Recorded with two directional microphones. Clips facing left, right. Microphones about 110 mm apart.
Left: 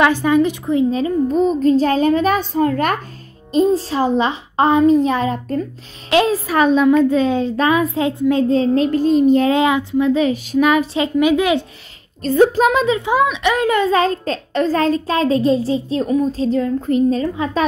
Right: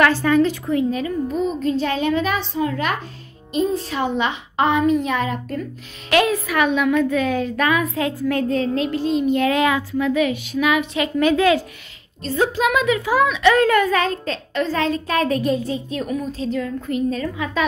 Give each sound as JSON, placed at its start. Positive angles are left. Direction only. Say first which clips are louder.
{"t": 0.0, "sound": "a woman's voice", "louder": "left 2 dB", "side_deg": 15}
{"t": 3.5, "sound": "a woman's voice", "louder": "left 6 dB", "side_deg": 30}
{"t": 11.1, "sound": "a woman's voice", "louder": "left 1 dB", "side_deg": 15}
{"t": 12.2, "sound": "a woman's voice", "louder": "left 7 dB", "side_deg": 45}